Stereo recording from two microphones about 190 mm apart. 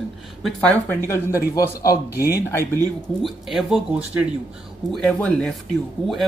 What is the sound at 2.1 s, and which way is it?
Speech, 55° left (ahead or behind).